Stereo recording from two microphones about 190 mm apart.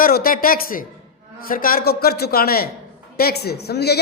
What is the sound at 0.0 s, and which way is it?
A man's voice, 50° left (ahead or behind).